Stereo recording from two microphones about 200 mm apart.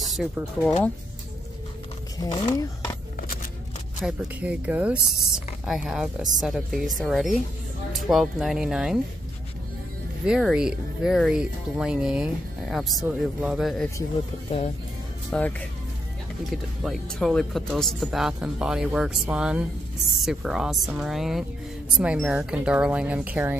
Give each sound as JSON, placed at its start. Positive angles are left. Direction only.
{"t": 0.0, "sound": "a sound", "side_deg": 0}
{"t": 2.1, "sound": "speech", "side_deg": 20}
{"t": 4.0, "sound": "speech", "side_deg": -5}
{"t": 10.2, "sound": "speech", "side_deg": -5}
{"t": 15.3, "sound": "speech", "side_deg": 5}
{"t": 16.8, "sound": "speech", "side_deg": 0}